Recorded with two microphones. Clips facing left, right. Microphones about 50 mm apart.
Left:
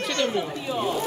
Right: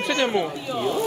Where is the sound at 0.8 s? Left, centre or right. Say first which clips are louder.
Right 2 dB; centre.